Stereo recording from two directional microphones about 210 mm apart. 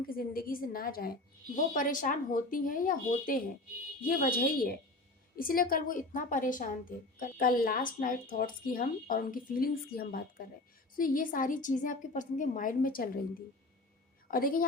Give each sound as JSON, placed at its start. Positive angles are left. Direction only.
{"t": 0.1, "sound": "a woman's voice", "side_deg": 45}
{"t": 14.3, "sound": "a woman's voice", "side_deg": 40}